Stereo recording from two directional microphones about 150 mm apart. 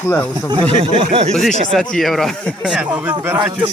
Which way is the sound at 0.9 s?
40° right (ahead or behind).